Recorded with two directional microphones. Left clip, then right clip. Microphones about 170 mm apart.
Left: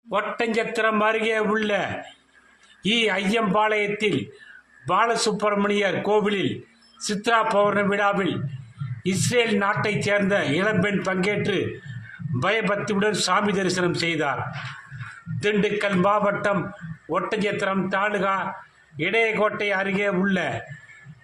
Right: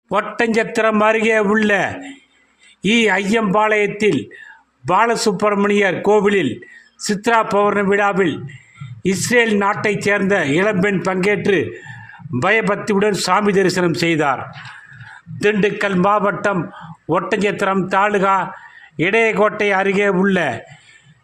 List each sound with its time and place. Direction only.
0.1 s a man's voice: 35° right (ahead or behind)
15.4 s a man's voice: 40° right (ahead or behind)